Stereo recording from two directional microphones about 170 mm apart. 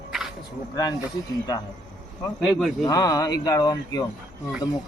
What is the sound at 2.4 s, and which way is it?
Speech, centre (ahead or behind).